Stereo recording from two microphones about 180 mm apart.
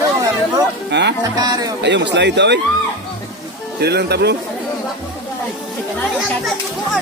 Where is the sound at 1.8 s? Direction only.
75° right (ahead or behind).